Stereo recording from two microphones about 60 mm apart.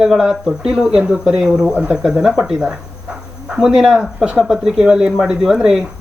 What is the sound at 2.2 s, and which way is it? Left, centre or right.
Speech, centre.